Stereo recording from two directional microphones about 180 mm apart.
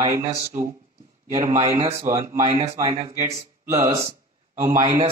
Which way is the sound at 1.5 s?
35° right (ahead or behind).